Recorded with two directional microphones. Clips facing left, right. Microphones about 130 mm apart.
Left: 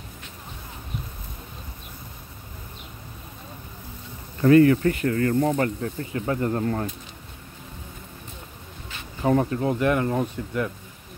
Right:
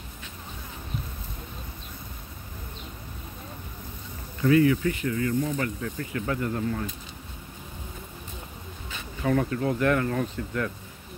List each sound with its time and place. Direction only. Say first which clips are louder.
4.4 s speech: left 5 dB; 50° left (ahead or behind)
5.8 s speech: left 3 dB; 30° left (ahead or behind)
9.2 s speech: left 3 dB; 30° left (ahead or behind)